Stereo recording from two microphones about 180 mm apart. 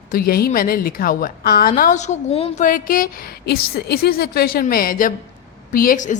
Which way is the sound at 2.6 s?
50° left (ahead or behind).